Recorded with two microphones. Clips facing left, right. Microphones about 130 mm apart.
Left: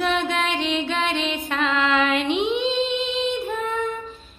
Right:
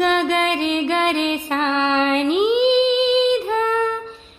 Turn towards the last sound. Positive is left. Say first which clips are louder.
# right 6 dB
turn(degrees=-90)